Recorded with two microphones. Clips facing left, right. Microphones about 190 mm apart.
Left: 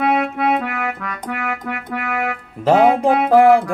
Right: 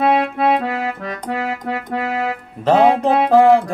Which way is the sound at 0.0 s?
30° right (ahead or behind).